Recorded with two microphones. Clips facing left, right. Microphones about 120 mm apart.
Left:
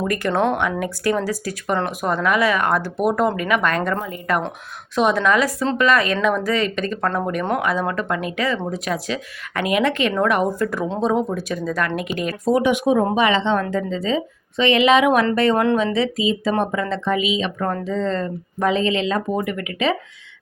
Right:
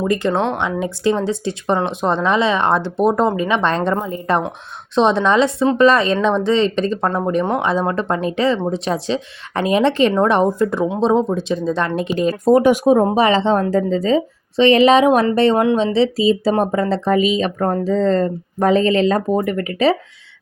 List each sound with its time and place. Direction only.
0.0 s speech: 20° right (ahead or behind)
12.5 s speech: 45° right (ahead or behind)